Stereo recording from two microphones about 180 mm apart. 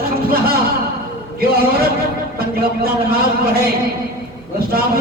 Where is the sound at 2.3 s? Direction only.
55° right (ahead or behind).